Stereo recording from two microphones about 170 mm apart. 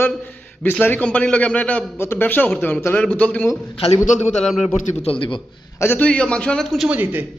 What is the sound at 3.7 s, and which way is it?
Speech, 35° left (ahead or behind).